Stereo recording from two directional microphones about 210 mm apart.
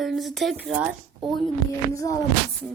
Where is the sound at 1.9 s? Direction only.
15° left (ahead or behind).